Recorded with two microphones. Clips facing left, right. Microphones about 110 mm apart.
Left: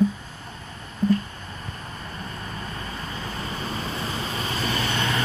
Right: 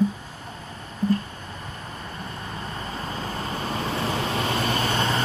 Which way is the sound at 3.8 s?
65° right (ahead or behind).